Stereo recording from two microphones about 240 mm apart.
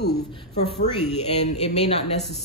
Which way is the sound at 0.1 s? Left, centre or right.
Centre.